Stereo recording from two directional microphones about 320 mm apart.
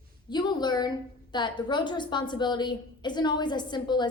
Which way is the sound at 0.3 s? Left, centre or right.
Centre.